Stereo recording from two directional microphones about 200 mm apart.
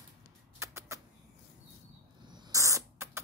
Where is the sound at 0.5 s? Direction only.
15° right (ahead or behind).